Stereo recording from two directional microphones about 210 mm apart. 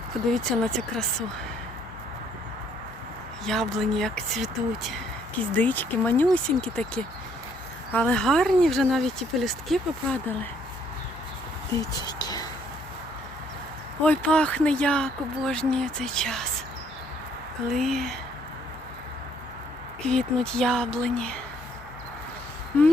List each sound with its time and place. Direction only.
0.3 s speech: centre (ahead or behind)
3.4 s speech: centre (ahead or behind)
12.0 s a sound: 20° left (ahead or behind)
14.0 s speech: 5° left (ahead or behind)
17.7 s speech: centre (ahead or behind)
20.1 s speech: 5° left (ahead or behind)